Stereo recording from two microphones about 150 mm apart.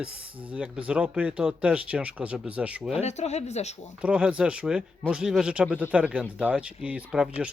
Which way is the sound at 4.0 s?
5° right (ahead or behind).